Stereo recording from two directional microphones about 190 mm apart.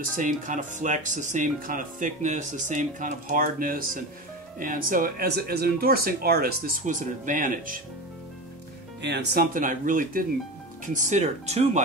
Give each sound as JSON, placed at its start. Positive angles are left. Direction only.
{"t": 0.1, "sound": "speech", "side_deg": -45}
{"t": 9.0, "sound": "speech", "side_deg": -60}